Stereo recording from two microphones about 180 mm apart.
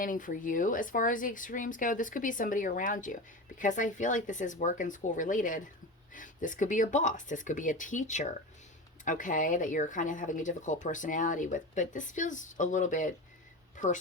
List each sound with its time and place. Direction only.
0.0 s speech: 50° left (ahead or behind)